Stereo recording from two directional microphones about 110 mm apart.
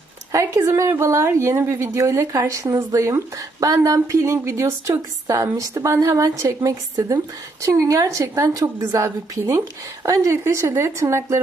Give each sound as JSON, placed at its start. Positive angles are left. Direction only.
{"t": 0.3, "sound": "a woman's voice", "side_deg": -25}